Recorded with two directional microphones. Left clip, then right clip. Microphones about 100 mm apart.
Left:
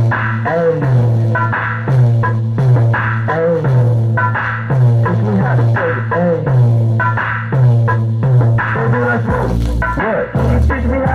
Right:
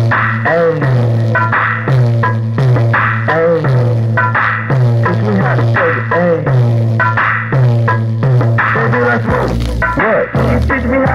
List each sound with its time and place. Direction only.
0.1 s music: 40° right (ahead or behind)